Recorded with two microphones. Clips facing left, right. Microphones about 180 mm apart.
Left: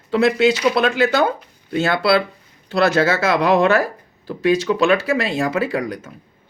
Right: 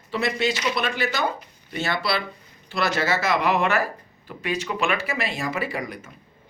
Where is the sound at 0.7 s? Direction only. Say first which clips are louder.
Left 9 dB; 60° left (ahead or behind).